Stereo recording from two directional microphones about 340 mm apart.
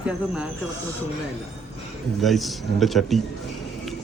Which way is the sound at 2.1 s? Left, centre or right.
Centre.